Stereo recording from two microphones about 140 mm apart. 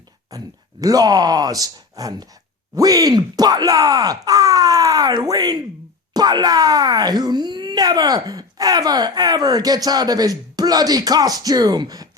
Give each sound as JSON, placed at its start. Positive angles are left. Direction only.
{"t": 0.3, "sound": "speech", "side_deg": -25}